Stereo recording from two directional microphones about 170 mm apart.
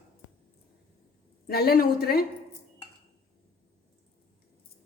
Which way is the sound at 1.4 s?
65° left (ahead or behind).